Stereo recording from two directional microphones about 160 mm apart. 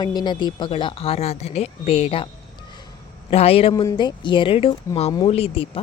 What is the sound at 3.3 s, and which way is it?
Speech, 40° left (ahead or behind).